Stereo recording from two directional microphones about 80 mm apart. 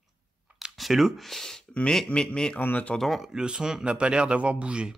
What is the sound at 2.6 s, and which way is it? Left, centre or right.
Speech, left.